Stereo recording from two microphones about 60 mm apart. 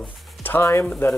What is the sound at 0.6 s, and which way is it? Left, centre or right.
Speech, left.